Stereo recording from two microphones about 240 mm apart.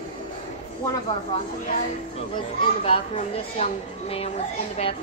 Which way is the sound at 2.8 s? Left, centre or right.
Left.